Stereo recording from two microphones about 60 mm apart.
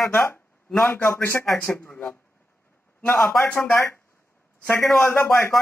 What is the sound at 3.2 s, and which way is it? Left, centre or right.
Speech, centre.